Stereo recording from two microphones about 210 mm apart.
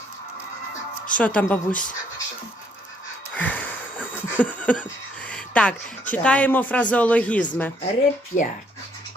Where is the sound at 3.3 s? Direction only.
5° left (ahead or behind).